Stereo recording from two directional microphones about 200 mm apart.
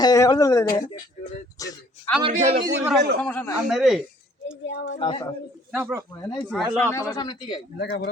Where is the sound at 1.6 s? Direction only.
15° left (ahead or behind).